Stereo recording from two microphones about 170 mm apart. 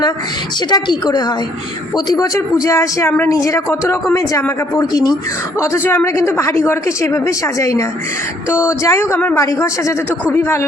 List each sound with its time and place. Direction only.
0.7 s a man's voice: 25° left (ahead or behind)